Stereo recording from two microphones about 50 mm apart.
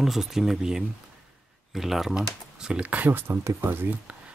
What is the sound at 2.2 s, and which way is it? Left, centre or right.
Speech, centre.